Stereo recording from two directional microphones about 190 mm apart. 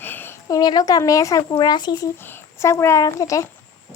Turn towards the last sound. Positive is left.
turn(degrees=15)  # may be behind; listen again after turning